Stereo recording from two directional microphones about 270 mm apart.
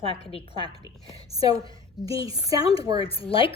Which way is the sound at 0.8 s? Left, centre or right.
Centre.